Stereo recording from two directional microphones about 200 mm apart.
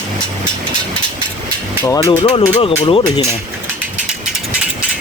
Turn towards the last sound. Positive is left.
turn(degrees=30)  # may be behind; listen again after turning